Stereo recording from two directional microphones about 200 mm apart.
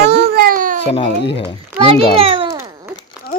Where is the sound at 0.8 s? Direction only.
30° left (ahead or behind).